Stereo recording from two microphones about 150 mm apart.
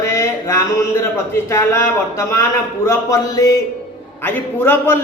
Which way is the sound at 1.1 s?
15° left (ahead or behind).